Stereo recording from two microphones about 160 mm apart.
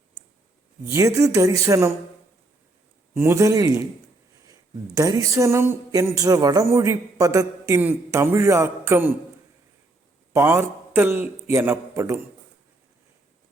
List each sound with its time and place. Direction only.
0.9 s speech: 20° right (ahead or behind)
3.2 s speech: 20° right (ahead or behind)
10.3 s a man's voice: 15° right (ahead or behind)